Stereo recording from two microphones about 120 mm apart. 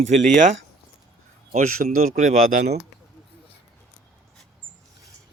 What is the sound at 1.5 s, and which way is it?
Speech, 80° right.